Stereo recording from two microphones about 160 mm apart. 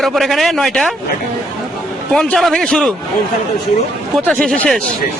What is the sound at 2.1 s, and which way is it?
Speech, centre (ahead or behind).